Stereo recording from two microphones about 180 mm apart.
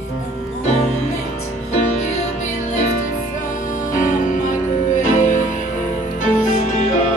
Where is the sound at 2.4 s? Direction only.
45° left (ahead or behind).